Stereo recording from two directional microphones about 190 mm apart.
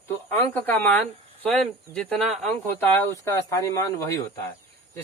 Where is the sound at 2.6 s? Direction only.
10° left (ahead or behind).